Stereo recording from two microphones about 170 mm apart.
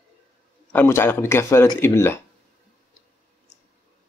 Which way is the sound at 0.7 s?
15° left (ahead or behind).